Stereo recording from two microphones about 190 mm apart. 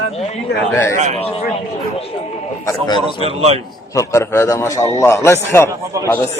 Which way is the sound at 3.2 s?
35° right (ahead or behind).